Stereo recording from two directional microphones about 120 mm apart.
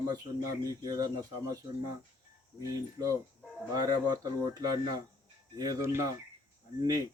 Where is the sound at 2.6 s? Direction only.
25° right (ahead or behind).